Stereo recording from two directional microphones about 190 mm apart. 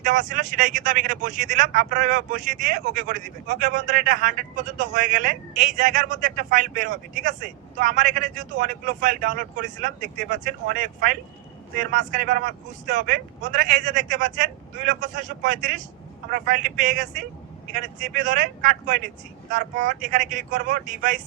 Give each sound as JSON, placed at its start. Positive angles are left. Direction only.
{"t": 0.0, "sound": "speech", "side_deg": -40}